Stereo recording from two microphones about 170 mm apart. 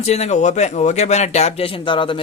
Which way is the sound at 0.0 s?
40° left (ahead or behind).